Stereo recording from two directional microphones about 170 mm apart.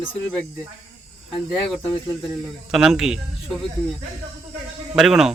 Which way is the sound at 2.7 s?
5° right (ahead or behind).